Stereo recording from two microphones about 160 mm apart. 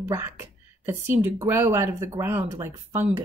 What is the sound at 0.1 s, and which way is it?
A woman's voice, 15° right (ahead or behind).